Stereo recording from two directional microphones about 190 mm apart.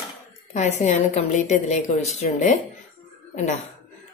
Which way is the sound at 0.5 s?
40° left (ahead or behind).